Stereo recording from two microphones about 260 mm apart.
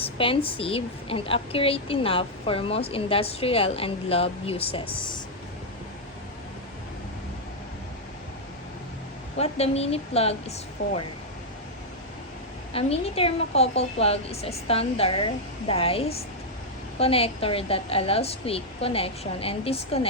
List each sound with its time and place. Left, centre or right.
0.0 s a woman's voice: left
9.4 s a woman's voice: left
12.7 s a woman's voice: left